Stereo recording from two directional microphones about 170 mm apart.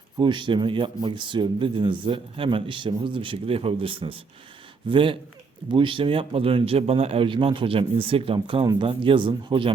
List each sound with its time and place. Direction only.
0.2 s speech: 30° right (ahead or behind)